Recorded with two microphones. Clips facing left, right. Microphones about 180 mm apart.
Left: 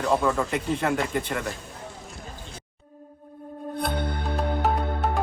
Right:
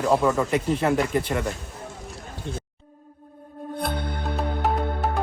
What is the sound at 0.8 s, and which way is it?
Speech, 35° right (ahead or behind).